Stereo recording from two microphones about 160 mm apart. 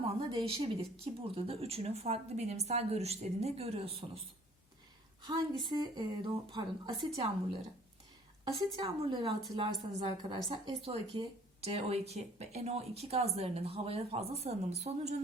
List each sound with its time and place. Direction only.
0.2 s speech: 30° right (ahead or behind)
5.2 s a woman's voice: 30° right (ahead or behind)
8.4 s a woman's voice: 30° right (ahead or behind)